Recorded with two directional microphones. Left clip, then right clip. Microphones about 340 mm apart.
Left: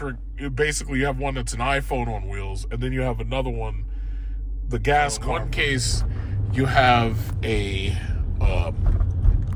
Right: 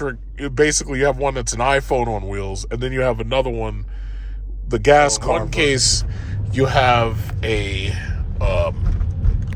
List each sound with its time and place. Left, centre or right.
0.0 s speech: right
4.7 s speech: right; by 8.7 s centre